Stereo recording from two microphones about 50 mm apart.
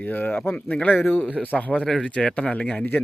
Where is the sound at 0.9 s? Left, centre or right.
Left.